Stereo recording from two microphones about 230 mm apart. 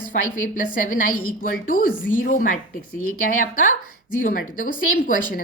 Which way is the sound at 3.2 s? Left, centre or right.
Left.